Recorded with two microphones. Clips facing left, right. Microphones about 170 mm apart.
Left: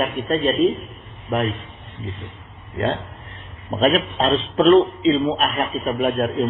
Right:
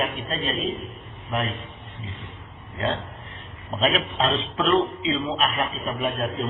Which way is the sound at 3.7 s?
45° left (ahead or behind).